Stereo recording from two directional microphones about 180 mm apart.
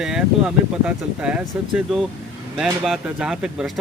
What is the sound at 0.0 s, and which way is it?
Speech, 5° right (ahead or behind).